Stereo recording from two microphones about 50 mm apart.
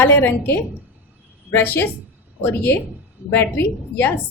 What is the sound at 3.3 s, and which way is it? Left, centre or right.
Speech, left.